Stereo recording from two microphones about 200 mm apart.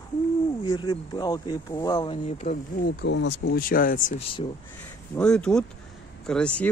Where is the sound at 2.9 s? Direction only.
60° left (ahead or behind); by 4.1 s 45° left (ahead or behind).